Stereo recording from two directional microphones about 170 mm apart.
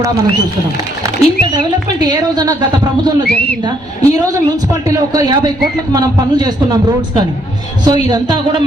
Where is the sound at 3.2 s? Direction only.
10° left (ahead or behind).